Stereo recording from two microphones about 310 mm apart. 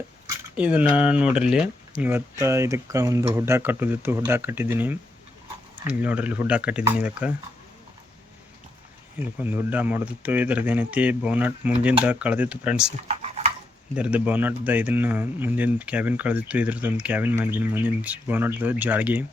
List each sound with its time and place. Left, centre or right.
0.5 s a man's voice: centre
9.4 s a man's voice: centre
13.1 s a sound: right
13.9 s a man's voice: centre